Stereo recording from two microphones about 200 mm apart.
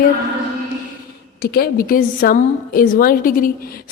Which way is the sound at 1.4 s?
50° left (ahead or behind).